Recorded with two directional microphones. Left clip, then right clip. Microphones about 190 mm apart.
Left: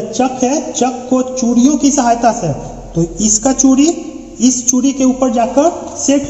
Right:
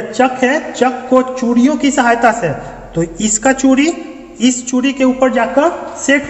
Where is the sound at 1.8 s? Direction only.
50° right (ahead or behind).